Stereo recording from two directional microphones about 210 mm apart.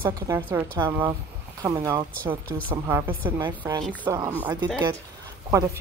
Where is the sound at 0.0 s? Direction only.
10° right (ahead or behind).